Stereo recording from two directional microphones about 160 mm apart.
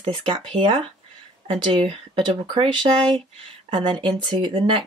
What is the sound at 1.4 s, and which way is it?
Speech, 35° right (ahead or behind).